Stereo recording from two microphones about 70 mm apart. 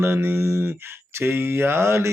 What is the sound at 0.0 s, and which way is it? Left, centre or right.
Mantra, right.